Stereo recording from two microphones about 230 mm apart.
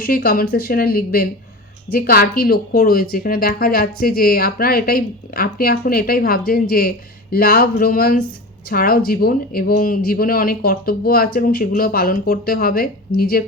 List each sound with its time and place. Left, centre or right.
0.0 s speech: left